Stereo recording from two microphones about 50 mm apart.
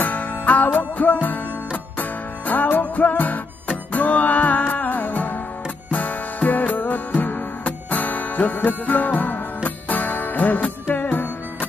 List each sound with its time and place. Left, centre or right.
0.0 s music: left